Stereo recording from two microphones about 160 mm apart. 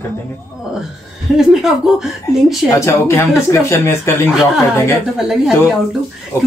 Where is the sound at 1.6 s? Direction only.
Centre (ahead or behind).